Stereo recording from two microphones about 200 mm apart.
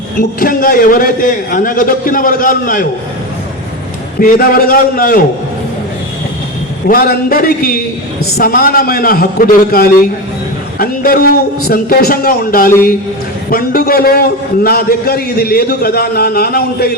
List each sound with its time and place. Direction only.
0.2 s a man's voice: 45° left (ahead or behind)
4.2 s a man's voice: 45° left (ahead or behind)
6.8 s a man's voice: 45° left (ahead or behind)